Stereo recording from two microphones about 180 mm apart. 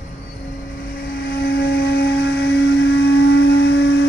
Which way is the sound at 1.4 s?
65° left (ahead or behind).